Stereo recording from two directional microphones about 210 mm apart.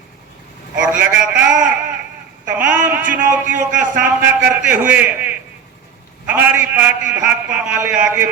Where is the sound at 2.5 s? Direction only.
5° right (ahead or behind).